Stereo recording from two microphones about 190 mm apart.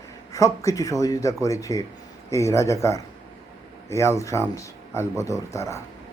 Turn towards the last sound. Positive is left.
turn(degrees=15)  # may be behind; listen again after turning